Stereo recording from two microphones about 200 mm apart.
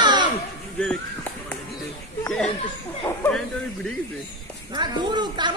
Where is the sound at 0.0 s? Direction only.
20° right (ahead or behind).